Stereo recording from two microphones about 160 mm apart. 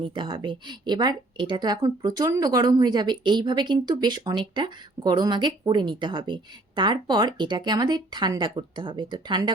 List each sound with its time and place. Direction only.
0.0 s a woman's voice: 30° right (ahead or behind)